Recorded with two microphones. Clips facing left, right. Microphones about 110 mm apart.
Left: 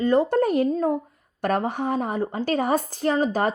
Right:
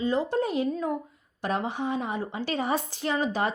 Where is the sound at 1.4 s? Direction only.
50° left (ahead or behind).